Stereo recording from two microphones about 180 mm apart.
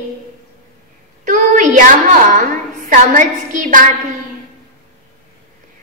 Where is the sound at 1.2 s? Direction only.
45° right (ahead or behind).